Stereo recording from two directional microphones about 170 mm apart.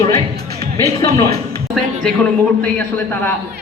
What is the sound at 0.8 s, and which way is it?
Speech, 20° left (ahead or behind).